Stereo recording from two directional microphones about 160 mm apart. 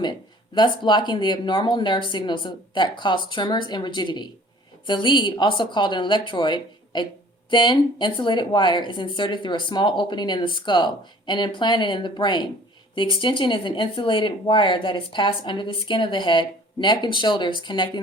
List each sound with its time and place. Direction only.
0.5 s speech: 30° left (ahead or behind)